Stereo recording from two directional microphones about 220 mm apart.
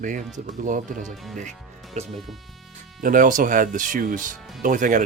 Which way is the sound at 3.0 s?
40° right (ahead or behind).